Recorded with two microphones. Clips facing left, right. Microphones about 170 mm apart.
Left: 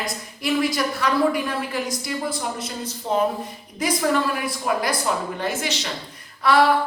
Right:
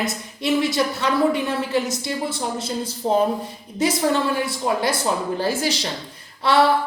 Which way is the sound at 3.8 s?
25° right (ahead or behind).